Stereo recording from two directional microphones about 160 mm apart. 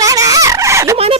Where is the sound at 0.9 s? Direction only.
35° right (ahead or behind).